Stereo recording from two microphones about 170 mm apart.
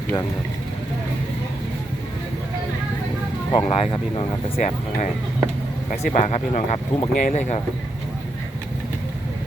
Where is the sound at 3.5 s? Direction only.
35° left (ahead or behind).